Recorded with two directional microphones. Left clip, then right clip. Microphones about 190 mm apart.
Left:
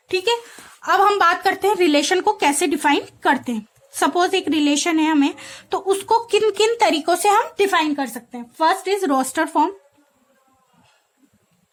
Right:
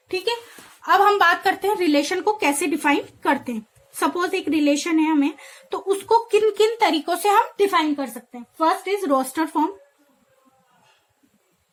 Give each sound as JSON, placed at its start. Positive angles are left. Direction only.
{"t": 0.8, "sound": "speech", "side_deg": 30}